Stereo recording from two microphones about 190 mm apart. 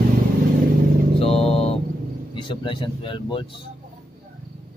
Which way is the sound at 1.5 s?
30° left (ahead or behind).